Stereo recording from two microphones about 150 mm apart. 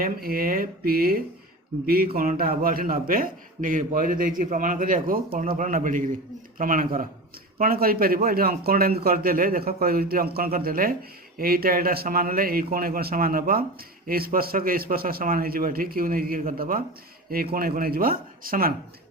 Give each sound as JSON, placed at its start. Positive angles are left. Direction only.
{"t": 0.0, "sound": "a man's voice", "side_deg": -80}
{"t": 7.6, "sound": "a man's voice", "side_deg": -75}
{"t": 17.2, "sound": "speech", "side_deg": -85}